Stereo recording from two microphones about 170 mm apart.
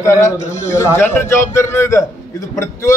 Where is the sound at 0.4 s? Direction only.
45° left (ahead or behind).